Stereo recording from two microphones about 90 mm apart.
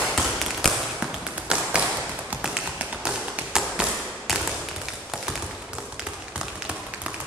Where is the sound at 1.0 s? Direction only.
10° right (ahead or behind).